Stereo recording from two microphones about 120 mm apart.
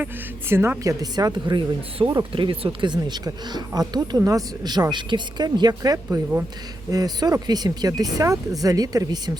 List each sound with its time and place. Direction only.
0.0 s a woman's voice: 20° right (ahead or behind)
1.1 s speech: 35° right (ahead or behind)